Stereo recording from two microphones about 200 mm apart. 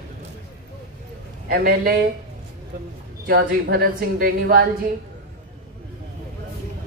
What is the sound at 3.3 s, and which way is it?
A woman's voice, 50° right (ahead or behind).